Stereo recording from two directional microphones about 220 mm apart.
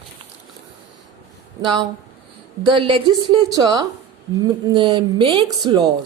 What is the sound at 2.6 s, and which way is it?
A woman's voice, 25° right (ahead or behind).